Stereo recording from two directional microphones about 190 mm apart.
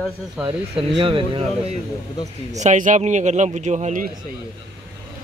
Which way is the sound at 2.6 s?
40° right (ahead or behind).